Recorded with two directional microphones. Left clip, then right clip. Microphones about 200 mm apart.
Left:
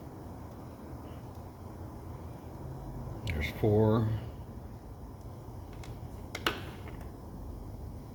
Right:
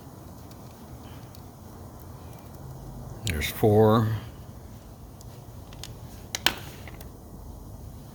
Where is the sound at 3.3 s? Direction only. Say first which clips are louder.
Right 7 dB; 55° right (ahead or behind).